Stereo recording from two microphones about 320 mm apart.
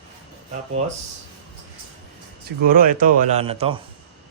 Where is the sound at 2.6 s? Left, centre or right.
Right.